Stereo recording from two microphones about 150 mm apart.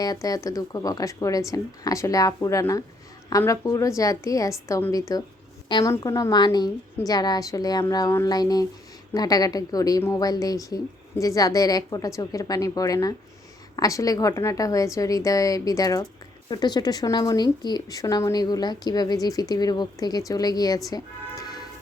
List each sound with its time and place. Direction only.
0.0 s a woman's voice: 25° left (ahead or behind)